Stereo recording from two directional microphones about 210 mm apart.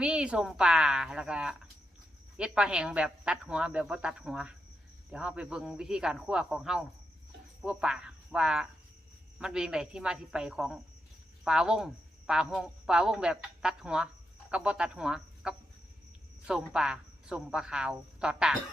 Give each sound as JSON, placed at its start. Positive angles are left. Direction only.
{"t": 0.0, "sound": "speech", "side_deg": -5}